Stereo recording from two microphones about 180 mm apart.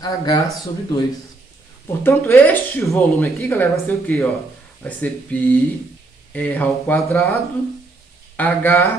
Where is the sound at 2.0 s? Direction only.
10° left (ahead or behind).